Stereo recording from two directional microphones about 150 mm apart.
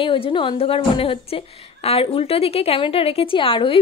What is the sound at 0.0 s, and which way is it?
A woman's voice, 35° left (ahead or behind).